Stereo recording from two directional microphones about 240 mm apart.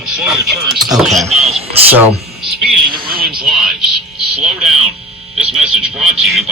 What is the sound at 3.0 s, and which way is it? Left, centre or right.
Speech, right.